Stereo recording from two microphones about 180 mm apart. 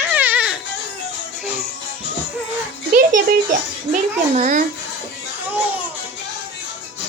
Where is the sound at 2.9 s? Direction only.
50° right (ahead or behind).